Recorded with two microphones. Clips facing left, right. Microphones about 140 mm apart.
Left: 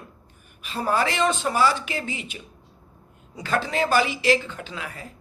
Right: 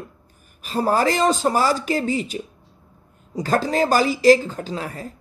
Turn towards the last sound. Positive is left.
turn(degrees=-40)  # may be behind; listen again after turning